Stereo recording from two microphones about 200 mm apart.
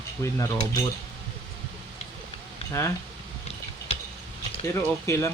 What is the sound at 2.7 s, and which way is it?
Speech, 15° left (ahead or behind).